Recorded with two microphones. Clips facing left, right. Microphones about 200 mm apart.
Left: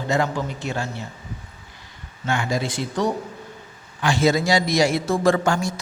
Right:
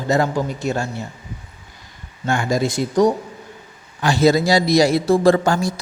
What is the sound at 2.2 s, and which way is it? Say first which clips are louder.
A man's voice: right 4 dB; 45° right (ahead or behind).